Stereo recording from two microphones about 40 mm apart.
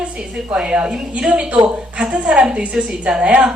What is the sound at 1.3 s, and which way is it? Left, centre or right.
A woman's voice, right.